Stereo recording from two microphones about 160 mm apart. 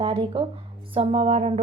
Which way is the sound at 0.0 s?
35° right (ahead or behind).